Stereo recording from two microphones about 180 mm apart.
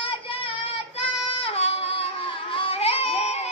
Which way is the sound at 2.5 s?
30° left (ahead or behind).